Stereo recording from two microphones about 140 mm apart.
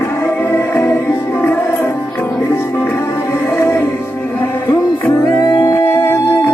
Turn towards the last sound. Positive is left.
turn(degrees=15)  # may be behind; listen again after turning